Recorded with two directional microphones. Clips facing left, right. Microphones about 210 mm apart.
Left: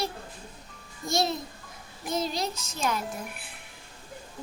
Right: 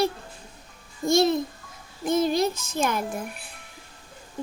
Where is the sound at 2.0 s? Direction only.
50° right (ahead or behind).